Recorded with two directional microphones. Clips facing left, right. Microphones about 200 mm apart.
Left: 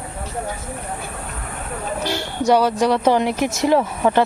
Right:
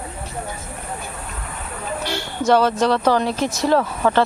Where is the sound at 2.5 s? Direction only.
15° left (ahead or behind).